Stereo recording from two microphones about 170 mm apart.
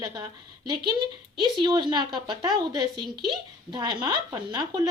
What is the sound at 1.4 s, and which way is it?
A woman's voice, 25° right (ahead or behind).